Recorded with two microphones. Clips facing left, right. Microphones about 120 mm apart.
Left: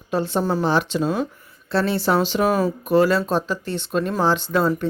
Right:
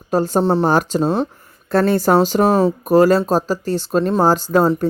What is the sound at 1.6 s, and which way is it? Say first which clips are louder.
Speech: right 5 dB; 50° right (ahead or behind).